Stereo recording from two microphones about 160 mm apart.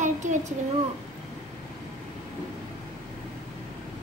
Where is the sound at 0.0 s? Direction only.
50° right (ahead or behind).